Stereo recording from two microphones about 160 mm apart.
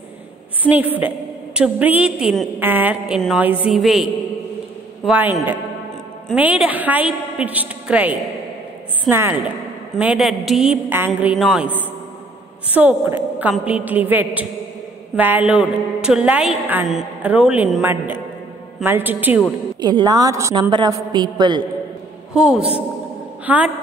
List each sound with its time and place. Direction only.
0.7 s a woman's voice: 10° right (ahead or behind)
6.3 s a woman's voice: 10° right (ahead or behind)
19.8 s a man's voice: 25° right (ahead or behind)
22.3 s a woman's voice: 5° right (ahead or behind)